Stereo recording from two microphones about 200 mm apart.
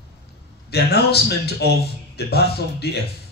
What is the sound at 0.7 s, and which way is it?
A man's voice, 55° left (ahead or behind).